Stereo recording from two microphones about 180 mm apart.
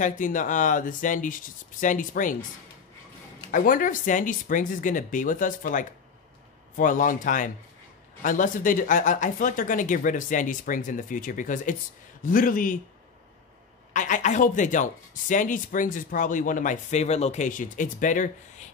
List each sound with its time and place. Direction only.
0.0 s speech: 45° left (ahead or behind)
3.5 s speech: 50° left (ahead or behind)
13.9 s speech: 45° left (ahead or behind)